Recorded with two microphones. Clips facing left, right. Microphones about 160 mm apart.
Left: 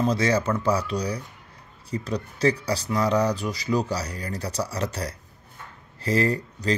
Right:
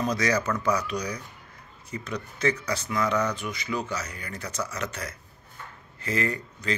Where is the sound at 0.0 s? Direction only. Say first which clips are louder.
Left 3 dB; 30° left (ahead or behind).